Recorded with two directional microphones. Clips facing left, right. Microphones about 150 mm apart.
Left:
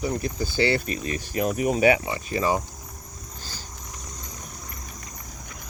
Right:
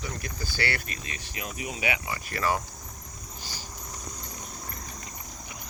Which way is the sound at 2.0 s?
20° left (ahead or behind).